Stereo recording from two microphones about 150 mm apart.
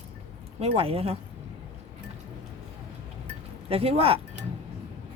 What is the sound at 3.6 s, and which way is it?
Speech, 40° right (ahead or behind).